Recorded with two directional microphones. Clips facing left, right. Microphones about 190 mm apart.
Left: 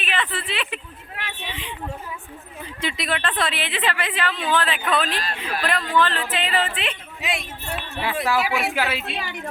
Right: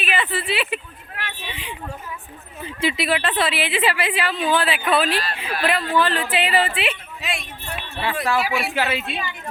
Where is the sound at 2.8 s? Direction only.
5° right (ahead or behind).